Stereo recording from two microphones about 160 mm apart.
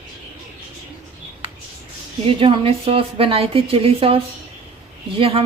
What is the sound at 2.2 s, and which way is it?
A woman's voice, 35° right (ahead or behind).